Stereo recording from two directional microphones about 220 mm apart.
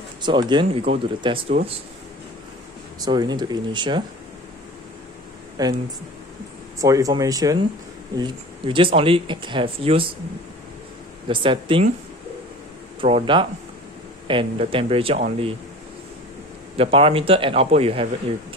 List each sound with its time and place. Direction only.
0.2 s speech: 20° right (ahead or behind)
3.0 s speech: 20° right (ahead or behind)
5.6 s speech: 15° right (ahead or behind)
6.8 s speech: 15° right (ahead or behind)
11.2 s speech: 25° right (ahead or behind)
13.0 s speech: 25° right (ahead or behind)
16.7 s speech: 25° right (ahead or behind)